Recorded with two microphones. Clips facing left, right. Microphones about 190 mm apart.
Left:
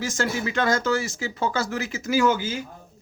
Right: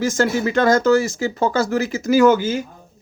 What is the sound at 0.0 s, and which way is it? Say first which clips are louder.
Speech: right 8 dB; 45° right (ahead or behind).